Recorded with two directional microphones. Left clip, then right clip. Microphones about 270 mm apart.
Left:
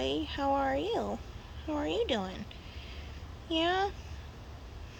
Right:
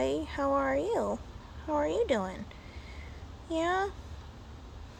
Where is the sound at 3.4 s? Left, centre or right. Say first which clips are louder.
Even; centre.